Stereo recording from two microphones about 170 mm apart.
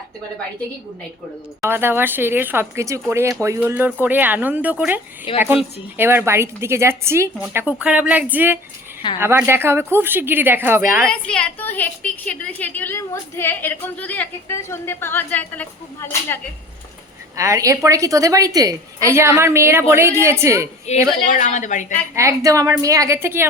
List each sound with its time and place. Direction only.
1.6 s a woman's voice: 15° right (ahead or behind)
5.3 s speech: 30° left (ahead or behind)
6.0 s a woman's voice: 15° right (ahead or behind)
11.0 s a woman's voice: 5° left (ahead or behind)
17.3 s a woman's voice: 20° right (ahead or behind)
20.9 s a woman's voice: 40° left (ahead or behind)
22.1 s a woman's voice: 15° right (ahead or behind)